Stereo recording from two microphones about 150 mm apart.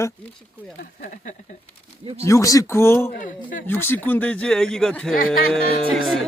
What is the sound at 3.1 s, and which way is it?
Speech, 65° left (ahead or behind).